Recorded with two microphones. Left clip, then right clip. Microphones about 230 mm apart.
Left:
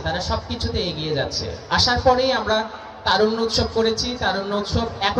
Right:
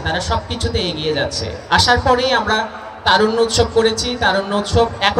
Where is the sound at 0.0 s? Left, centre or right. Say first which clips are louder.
Right 5 dB; right.